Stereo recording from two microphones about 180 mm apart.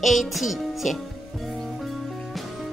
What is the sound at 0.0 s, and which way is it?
Music, centre (ahead or behind).